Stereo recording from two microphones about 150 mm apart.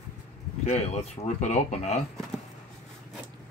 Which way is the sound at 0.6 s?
45° left (ahead or behind).